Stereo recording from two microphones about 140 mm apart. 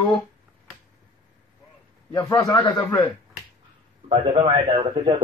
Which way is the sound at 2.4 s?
25° left (ahead or behind).